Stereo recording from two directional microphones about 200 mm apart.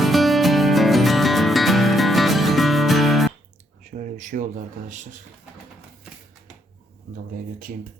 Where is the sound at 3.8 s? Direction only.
40° right (ahead or behind).